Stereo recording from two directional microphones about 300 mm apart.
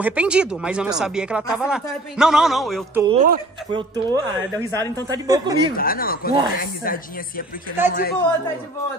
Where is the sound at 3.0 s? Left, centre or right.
Centre.